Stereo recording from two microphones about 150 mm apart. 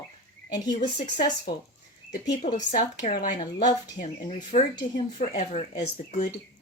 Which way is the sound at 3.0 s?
70° left (ahead or behind).